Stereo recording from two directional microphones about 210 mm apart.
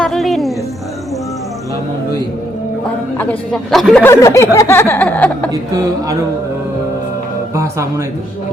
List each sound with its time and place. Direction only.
0.0 s music: centre (ahead or behind)
3.2 s speech: 5° left (ahead or behind)
5.5 s a woman's voice: 15° right (ahead or behind)
7.5 s speech: 15° right (ahead or behind)